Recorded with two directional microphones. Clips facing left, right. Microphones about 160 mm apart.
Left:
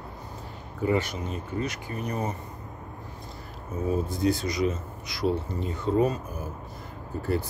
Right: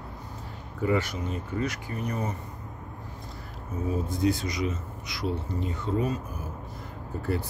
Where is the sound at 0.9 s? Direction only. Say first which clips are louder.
Left 1 dB; 20° left (ahead or behind).